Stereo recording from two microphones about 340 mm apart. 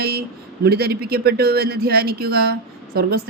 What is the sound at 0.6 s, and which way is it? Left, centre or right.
Speech, right.